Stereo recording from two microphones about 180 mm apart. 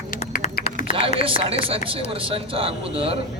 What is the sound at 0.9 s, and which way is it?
Speech, 30° right (ahead or behind).